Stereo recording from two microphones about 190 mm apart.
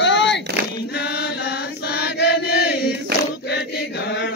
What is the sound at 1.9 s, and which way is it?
Chant, 60° left (ahead or behind).